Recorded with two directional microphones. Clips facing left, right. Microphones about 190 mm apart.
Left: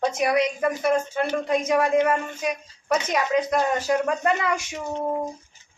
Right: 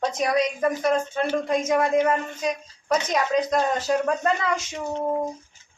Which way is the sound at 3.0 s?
10° left (ahead or behind).